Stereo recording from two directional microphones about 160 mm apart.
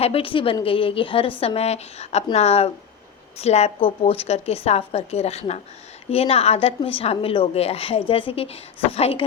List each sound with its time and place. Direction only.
0.0 s a woman's voice: 35° left (ahead or behind)